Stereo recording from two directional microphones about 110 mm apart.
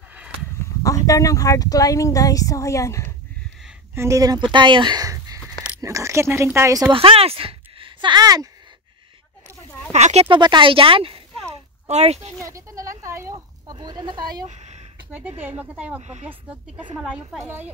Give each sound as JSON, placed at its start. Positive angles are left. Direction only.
{"t": 0.8, "sound": "speech", "side_deg": 30}
{"t": 3.9, "sound": "speech", "side_deg": -25}
{"t": 4.5, "sound": "speech", "side_deg": -45}
{"t": 6.9, "sound": "speech", "side_deg": -60}
{"t": 9.9, "sound": "speech", "side_deg": -90}
{"t": 10.2, "sound": "speech", "side_deg": -45}
{"t": 11.5, "sound": "a sound", "side_deg": -75}
{"t": 12.4, "sound": "speech", "side_deg": -30}
{"t": 14.5, "sound": "a sound", "side_deg": -90}
{"t": 15.1, "sound": "speech", "side_deg": -15}
{"t": 16.0, "sound": "speech", "side_deg": -90}
{"t": 16.3, "sound": "speech", "side_deg": -10}
{"t": 17.0, "sound": "speech", "side_deg": 0}